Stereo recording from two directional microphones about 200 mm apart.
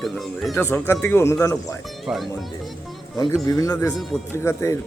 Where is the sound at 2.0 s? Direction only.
Centre (ahead or behind).